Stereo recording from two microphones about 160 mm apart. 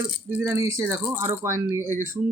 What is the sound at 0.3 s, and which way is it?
Speech, 15° right (ahead or behind).